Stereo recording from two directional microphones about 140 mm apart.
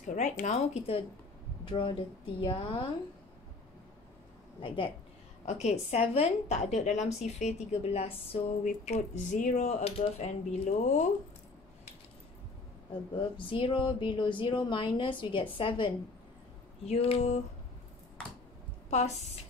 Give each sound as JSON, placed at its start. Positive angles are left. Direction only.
{"t": 0.1, "sound": "speech", "side_deg": 60}
{"t": 1.6, "sound": "speech", "side_deg": 35}
{"t": 4.6, "sound": "speech", "side_deg": 40}
{"t": 5.4, "sound": "a woman's voice", "side_deg": 55}
{"t": 8.6, "sound": "speech", "side_deg": 55}
{"t": 13.2, "sound": "a woman's voice", "side_deg": 40}
{"t": 18.9, "sound": "a woman's voice", "side_deg": 55}